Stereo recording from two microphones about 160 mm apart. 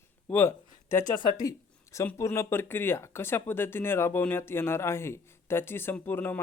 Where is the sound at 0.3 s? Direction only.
15° left (ahead or behind).